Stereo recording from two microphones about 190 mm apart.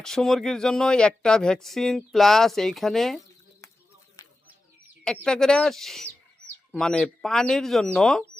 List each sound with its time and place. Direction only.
0.0 s speech: centre (ahead or behind)
4.2 s chicken: 20° left (ahead or behind)
5.0 s speech: 5° left (ahead or behind)